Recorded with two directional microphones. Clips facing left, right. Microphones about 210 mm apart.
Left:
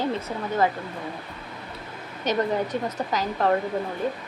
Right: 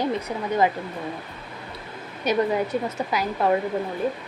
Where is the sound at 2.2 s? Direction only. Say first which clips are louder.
Right 2 dB; 10° right (ahead or behind).